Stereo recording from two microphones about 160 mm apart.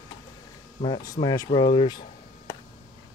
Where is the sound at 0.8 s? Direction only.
25° left (ahead or behind).